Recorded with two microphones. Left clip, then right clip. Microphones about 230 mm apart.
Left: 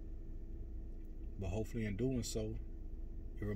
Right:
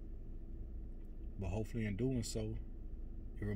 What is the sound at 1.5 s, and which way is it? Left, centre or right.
Speech, right.